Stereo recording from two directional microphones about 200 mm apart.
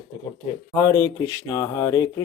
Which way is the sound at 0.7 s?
15° left (ahead or behind).